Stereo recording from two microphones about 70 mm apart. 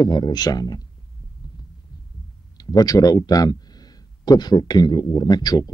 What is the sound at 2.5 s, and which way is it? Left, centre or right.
Speech, left.